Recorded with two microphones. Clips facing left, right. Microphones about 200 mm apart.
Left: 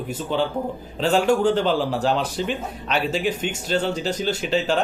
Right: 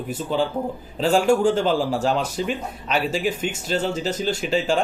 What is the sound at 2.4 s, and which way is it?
A man's voice, 5° right (ahead or behind).